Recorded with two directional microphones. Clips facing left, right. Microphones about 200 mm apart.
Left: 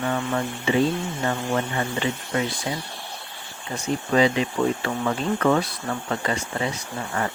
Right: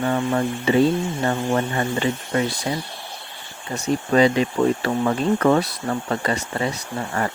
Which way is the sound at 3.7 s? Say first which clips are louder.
Right 3 dB; 40° right (ahead or behind).